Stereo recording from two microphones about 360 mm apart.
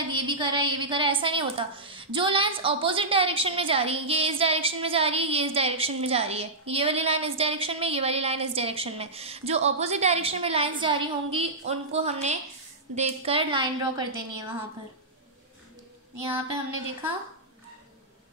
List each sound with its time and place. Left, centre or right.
0.0 s a woman's voice: centre